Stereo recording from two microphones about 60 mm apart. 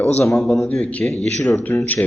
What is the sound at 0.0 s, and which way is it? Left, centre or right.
Speech, left.